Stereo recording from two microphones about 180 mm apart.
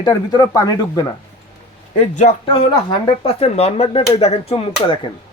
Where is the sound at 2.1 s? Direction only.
40° left (ahead or behind).